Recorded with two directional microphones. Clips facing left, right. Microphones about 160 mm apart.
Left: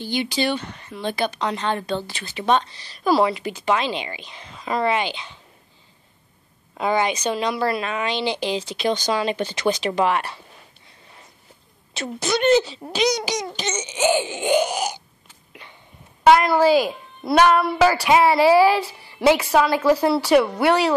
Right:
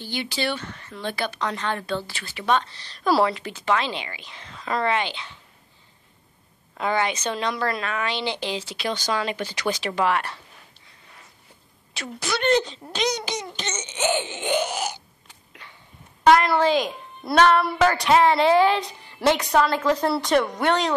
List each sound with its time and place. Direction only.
0.0 s a woman's voice: 15° left (ahead or behind)
6.8 s a woman's voice: 15° left (ahead or behind)
11.9 s speech: 25° left (ahead or behind)
12.4 s a woman's voice: 5° left (ahead or behind)
16.3 s a woman's voice: 5° left (ahead or behind)